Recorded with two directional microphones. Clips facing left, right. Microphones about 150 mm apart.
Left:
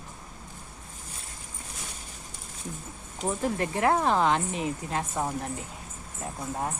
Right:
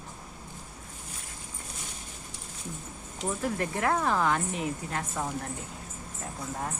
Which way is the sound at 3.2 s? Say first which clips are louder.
Left 2 dB; 20° left (ahead or behind).